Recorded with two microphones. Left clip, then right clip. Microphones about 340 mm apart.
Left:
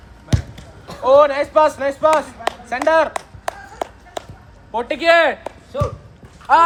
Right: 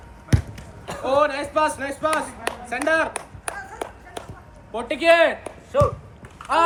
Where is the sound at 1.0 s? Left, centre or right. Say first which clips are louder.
Left 8 dB; left.